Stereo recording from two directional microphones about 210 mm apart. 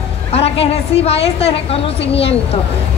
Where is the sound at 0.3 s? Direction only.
30° left (ahead or behind).